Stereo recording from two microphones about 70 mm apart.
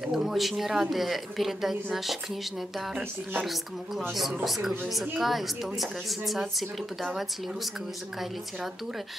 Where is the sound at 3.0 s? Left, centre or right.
Right.